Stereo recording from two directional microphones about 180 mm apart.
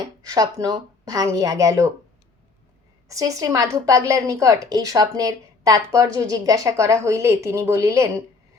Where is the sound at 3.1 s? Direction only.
20° right (ahead or behind).